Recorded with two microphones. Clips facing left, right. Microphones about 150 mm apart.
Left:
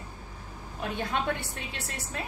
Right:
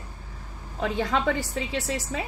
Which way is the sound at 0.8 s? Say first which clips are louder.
Right 6 dB; 85° right.